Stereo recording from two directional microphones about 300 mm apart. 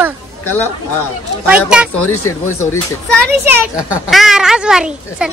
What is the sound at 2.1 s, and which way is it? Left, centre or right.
Speech, left.